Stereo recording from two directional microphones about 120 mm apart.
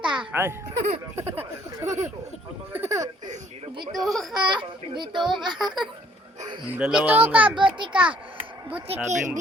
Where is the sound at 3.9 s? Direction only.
Centre (ahead or behind).